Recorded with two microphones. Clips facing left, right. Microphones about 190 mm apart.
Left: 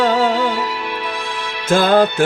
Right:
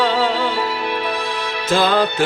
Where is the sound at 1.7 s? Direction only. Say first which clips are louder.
Left 4 dB; 50° left (ahead or behind).